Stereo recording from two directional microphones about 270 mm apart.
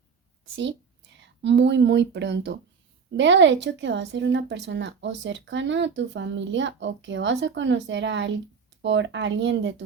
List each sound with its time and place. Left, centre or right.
1.1 s a woman's voice: right